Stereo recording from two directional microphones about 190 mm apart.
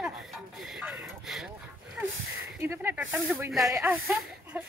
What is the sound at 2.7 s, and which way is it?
Speech, 10° right (ahead or behind).